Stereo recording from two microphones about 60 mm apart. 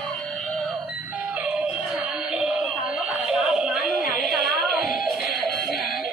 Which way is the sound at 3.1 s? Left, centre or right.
Centre.